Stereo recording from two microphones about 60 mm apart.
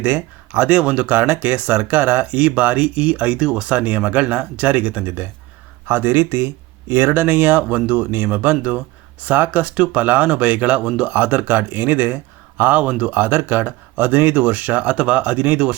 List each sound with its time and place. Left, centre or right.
0.0 s speech: right